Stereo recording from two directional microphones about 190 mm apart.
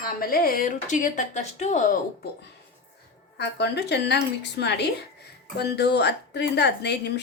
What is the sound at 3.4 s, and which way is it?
Speech, 60° left (ahead or behind).